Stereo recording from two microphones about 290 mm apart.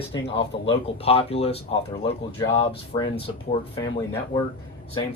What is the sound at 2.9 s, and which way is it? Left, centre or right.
Speech, centre.